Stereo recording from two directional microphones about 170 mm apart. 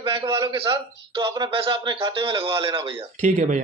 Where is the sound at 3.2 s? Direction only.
45° right (ahead or behind).